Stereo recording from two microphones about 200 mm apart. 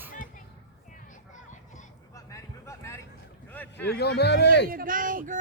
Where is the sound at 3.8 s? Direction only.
55° left (ahead or behind).